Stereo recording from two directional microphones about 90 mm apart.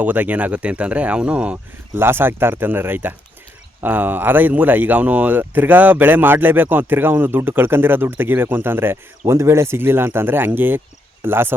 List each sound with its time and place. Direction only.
0.0 s speech: 20° right (ahead or behind)
2.0 s speech: 25° right (ahead or behind)